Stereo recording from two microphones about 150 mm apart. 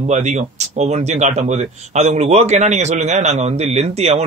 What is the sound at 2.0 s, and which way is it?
Speech, 45° right (ahead or behind).